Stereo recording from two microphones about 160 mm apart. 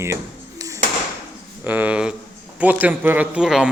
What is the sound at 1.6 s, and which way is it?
A man's voice, 10° right (ahead or behind).